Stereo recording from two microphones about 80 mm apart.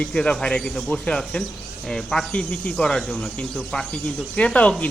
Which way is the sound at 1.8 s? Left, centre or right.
Centre.